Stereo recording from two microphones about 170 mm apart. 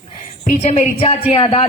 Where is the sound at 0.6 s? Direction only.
40° left (ahead or behind).